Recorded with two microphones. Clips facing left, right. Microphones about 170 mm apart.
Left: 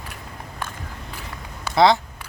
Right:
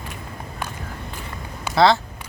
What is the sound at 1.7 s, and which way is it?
Speech, 20° left (ahead or behind).